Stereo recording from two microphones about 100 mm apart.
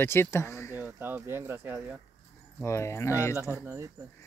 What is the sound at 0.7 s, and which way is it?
Speech, 20° right (ahead or behind).